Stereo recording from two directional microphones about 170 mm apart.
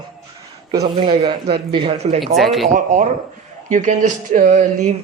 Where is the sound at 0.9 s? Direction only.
35° right (ahead or behind).